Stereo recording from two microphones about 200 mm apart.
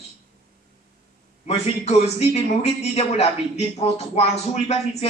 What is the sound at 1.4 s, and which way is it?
A man's voice, 30° left (ahead or behind).